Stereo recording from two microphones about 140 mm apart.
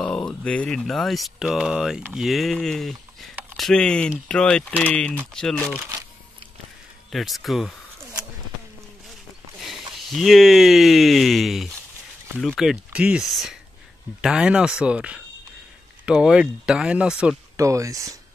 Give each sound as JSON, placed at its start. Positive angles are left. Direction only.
{"t": 0.0, "sound": "speech", "side_deg": 5}
{"t": 7.1, "sound": "speech", "side_deg": 0}
{"t": 9.9, "sound": "speech", "side_deg": 0}
{"t": 17.6, "sound": "speech", "side_deg": -20}